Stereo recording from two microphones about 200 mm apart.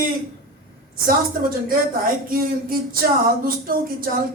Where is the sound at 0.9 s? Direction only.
45° right (ahead or behind).